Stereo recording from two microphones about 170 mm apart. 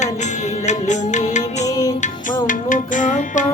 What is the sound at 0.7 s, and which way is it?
Music, 45° left (ahead or behind).